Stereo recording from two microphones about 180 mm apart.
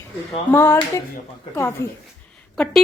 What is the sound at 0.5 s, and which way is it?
Speech, 15° left (ahead or behind).